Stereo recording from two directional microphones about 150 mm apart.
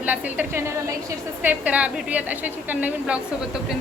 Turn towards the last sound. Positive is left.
turn(degrees=-10)  # may be behind; listen again after turning